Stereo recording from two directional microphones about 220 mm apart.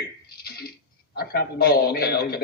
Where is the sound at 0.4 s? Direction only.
45° left (ahead or behind).